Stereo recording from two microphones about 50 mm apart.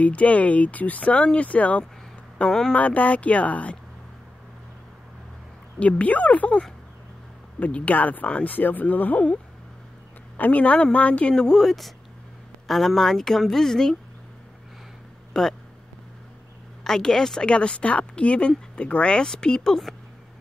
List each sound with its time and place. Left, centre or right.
0.0 s speech: left
2.4 s a woman's voice: centre
2.7 s speech: left
5.8 s speech: left
7.6 s speech: left
10.3 s speech: left
11.3 s a woman's voice: centre
11.6 s a woman's voice: centre
15.3 s a woman's voice: centre
16.8 s a woman's voice: centre
17.5 s a woman's voice: left